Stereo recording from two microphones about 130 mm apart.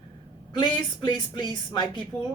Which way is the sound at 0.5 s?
35° left (ahead or behind).